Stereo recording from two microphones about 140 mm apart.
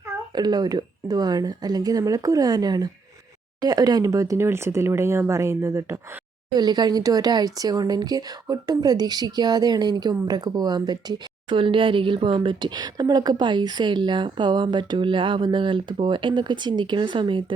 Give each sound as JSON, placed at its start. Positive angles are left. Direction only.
{"t": 0.3, "sound": "speech", "side_deg": -30}